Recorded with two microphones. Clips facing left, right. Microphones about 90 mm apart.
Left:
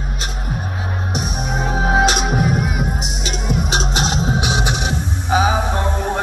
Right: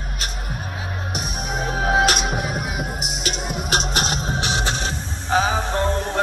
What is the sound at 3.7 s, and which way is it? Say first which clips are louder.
Music: right 1 dB; 20° left (ahead or behind).